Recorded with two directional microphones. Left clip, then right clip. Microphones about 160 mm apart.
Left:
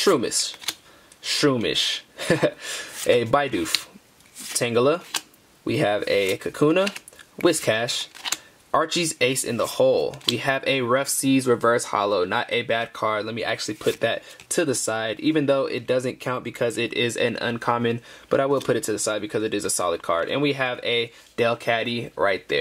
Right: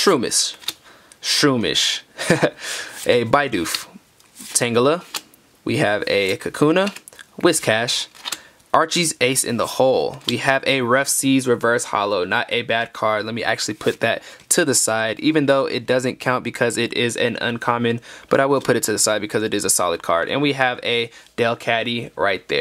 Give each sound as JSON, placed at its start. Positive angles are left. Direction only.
{"t": 0.0, "sound": "speech", "side_deg": -25}
{"t": 18.3, "sound": "speech", "side_deg": -35}